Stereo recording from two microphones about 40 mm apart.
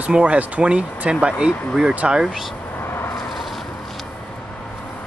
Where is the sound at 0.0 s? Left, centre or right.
Right.